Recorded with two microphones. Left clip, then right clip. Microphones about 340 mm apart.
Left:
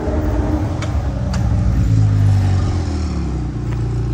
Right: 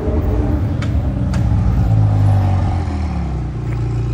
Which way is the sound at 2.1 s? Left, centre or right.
Centre.